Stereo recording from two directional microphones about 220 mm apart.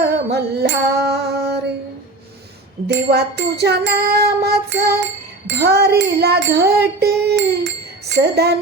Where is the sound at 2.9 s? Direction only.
50° right (ahead or behind).